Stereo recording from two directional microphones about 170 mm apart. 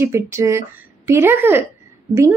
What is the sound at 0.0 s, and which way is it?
A woman's voice, 15° right (ahead or behind).